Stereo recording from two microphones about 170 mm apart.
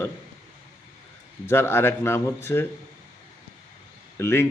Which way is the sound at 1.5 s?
15° left (ahead or behind).